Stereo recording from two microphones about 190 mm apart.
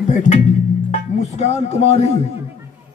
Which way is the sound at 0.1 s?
40° left (ahead or behind).